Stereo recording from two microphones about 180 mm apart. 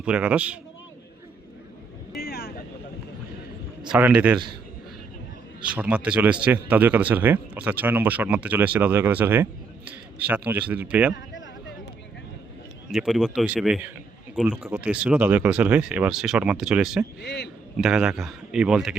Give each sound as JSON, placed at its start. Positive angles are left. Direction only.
{"t": 0.0, "sound": "speech", "side_deg": -10}
{"t": 2.1, "sound": "vehicle", "side_deg": 60}
{"t": 3.9, "sound": "speech", "side_deg": -5}
{"t": 5.7, "sound": "speech", "side_deg": -5}
{"t": 12.9, "sound": "a man's voice", "side_deg": 0}
{"t": 17.2, "sound": "a man's voice", "side_deg": 70}
{"t": 17.7, "sound": "a man's voice", "side_deg": -5}